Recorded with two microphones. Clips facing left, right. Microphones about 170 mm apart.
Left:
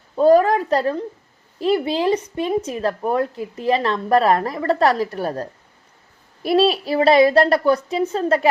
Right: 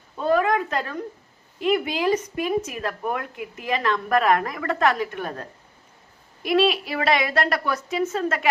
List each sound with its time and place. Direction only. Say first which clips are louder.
0.2 s a woman's voice: left 7 dB; 35° left (ahead or behind)